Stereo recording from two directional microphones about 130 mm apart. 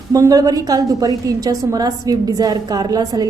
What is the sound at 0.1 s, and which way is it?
A woman's voice, 25° right (ahead or behind).